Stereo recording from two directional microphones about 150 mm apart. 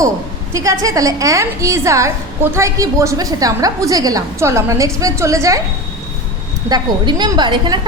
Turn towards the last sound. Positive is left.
turn(degrees=-30)  # may be behind; listen again after turning